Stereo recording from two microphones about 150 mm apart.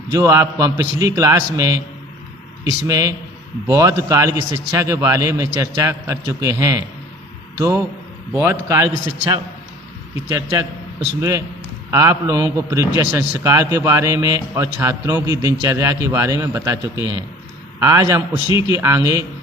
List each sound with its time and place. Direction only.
0.1 s a man's voice: 20° right (ahead or behind)
10.2 s a man's voice: 20° right (ahead or behind)